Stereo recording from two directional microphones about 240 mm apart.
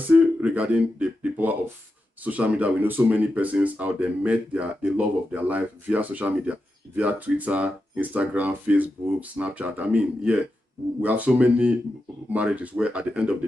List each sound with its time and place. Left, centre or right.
0.0 s speech: centre